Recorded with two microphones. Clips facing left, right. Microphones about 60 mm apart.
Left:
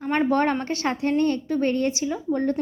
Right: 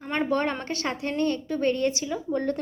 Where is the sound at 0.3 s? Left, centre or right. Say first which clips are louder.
Left 4 dB; left.